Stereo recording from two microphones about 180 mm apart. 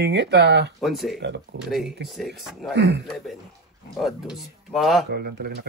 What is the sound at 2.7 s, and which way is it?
Speech, 75° right (ahead or behind).